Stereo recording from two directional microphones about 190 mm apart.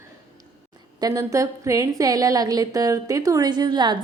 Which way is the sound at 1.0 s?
15° right (ahead or behind).